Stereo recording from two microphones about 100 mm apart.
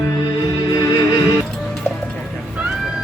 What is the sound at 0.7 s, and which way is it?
Music, 40° left (ahead or behind).